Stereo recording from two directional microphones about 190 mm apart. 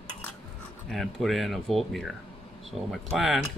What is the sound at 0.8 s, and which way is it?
Speech, centre (ahead or behind).